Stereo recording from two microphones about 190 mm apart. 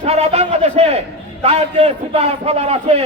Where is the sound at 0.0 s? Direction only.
35° right (ahead or behind).